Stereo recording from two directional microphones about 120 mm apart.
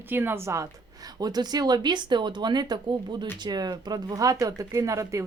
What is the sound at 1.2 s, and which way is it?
Speech, 35° right (ahead or behind).